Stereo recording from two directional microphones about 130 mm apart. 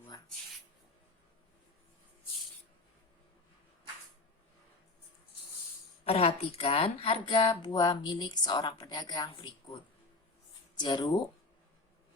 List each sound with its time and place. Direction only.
6.1 s speech: 50° left (ahead or behind)